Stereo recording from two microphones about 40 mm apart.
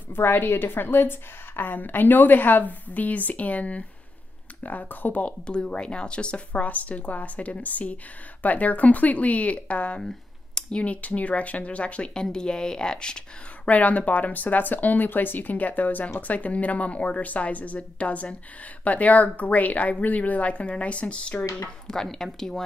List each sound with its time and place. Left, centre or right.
0.1 s a woman's voice: left
1.6 s speech: left
5.2 s speech: left
12.1 s speech: centre
13.7 s speech: left
21.8 s speech: centre